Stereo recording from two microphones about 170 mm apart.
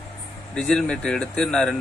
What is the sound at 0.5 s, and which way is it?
A man's voice, 5° left (ahead or behind).